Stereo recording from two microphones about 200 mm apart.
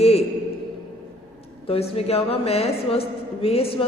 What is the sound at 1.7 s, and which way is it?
A woman's voice, 30° left (ahead or behind).